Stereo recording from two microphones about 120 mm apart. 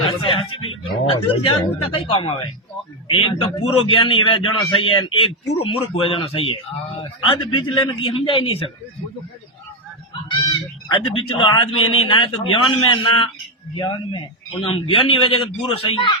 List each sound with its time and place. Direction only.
0.0 s a sound: 45° left (ahead or behind)
2.0 s a man's voice: 45° left (ahead or behind)
10.5 s a man's voice: 40° left (ahead or behind)
14.6 s a man's voice: 50° left (ahead or behind)